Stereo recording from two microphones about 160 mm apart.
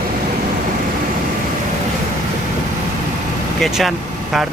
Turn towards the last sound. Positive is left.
turn(degrees=0)  # may be behind; listen again after turning